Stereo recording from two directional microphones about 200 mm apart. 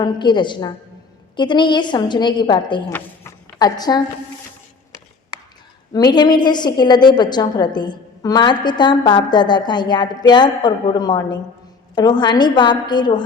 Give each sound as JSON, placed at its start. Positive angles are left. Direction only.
{"t": 0.0, "sound": "a woman's voice", "side_deg": 25}
{"t": 5.9, "sound": "a woman's voice", "side_deg": 20}